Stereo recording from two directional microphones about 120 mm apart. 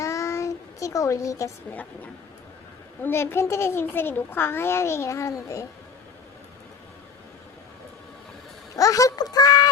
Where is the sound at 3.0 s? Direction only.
15° left (ahead or behind).